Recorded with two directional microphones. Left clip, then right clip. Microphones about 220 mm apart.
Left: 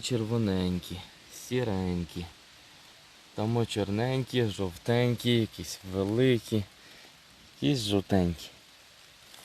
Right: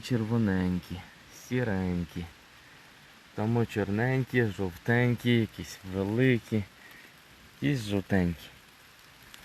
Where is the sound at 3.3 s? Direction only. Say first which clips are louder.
Even; 5° left (ahead or behind).